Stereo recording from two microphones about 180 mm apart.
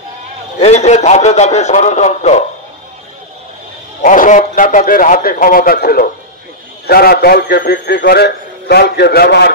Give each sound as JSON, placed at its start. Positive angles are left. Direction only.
{"t": 0.6, "sound": "a man's voice", "side_deg": 40}
{"t": 4.0, "sound": "a man's voice", "side_deg": 45}